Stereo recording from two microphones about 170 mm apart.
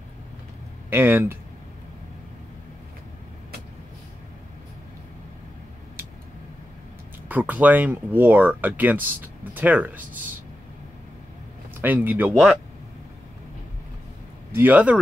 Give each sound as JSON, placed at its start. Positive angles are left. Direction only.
{"t": 0.8, "sound": "speech", "side_deg": -10}
{"t": 7.2, "sound": "speech", "side_deg": -10}
{"t": 11.8, "sound": "speech", "side_deg": -10}
{"t": 14.5, "sound": "speech", "side_deg": -10}